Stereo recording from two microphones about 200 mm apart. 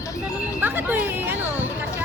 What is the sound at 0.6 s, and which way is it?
Speech, 10° right (ahead or behind).